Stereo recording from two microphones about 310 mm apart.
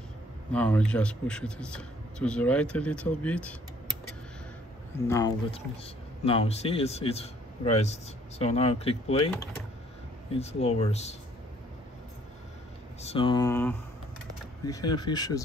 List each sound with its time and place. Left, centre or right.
0.5 s a man's voice: centre
5.0 s a man's voice: centre
13.0 s speech: centre